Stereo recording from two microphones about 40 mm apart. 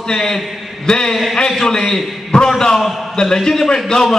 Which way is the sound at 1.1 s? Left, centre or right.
Centre.